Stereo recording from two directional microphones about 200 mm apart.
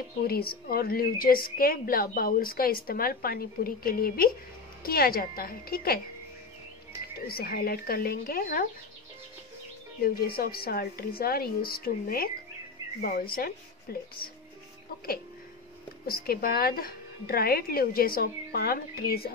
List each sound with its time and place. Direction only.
0.2 s a woman's voice: 50° left (ahead or behind)
7.2 s a woman's voice: 50° left (ahead or behind)
10.0 s a woman's voice: 50° left (ahead or behind)
16.1 s a woman's voice: 50° left (ahead or behind)